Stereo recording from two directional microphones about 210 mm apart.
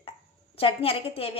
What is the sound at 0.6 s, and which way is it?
Speech, 25° left (ahead or behind).